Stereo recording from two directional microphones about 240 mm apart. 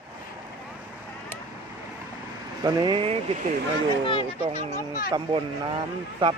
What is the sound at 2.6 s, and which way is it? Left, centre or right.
Speech, centre.